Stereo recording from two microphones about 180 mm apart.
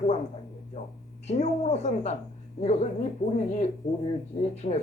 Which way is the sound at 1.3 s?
35° left (ahead or behind).